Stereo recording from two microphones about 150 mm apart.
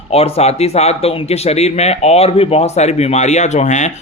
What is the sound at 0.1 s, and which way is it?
Speech, 45° left (ahead or behind).